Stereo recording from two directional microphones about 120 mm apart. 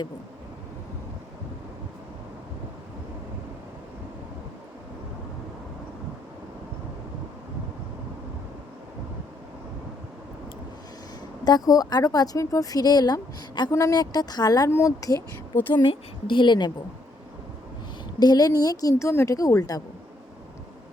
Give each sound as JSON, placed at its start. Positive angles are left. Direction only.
{"t": 11.4, "sound": "a woman's voice", "side_deg": 30}
{"t": 15.7, "sound": "speech", "side_deg": 40}
{"t": 18.2, "sound": "a woman's voice", "side_deg": 35}